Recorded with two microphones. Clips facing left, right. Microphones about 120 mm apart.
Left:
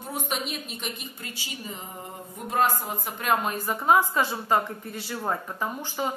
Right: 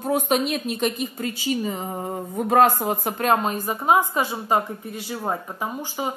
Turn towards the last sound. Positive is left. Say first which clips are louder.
# right 2 dB
turn(degrees=-15)  # may be behind; listen again after turning